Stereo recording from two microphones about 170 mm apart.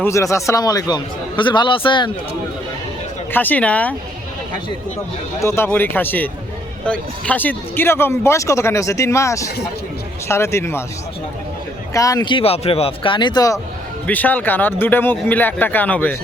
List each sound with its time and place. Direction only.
0.0 s a man's voice: 15° left (ahead or behind)
3.3 s speech: 10° left (ahead or behind)
5.4 s speech: 15° left (ahead or behind)
11.9 s a man's voice: 20° left (ahead or behind)
14.1 s speech: 10° left (ahead or behind)